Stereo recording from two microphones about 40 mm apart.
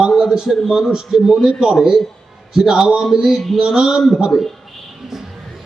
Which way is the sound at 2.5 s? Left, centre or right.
Centre.